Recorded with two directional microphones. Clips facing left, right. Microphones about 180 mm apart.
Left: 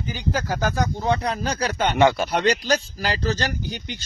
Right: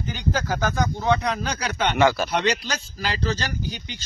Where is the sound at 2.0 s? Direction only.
25° left (ahead or behind).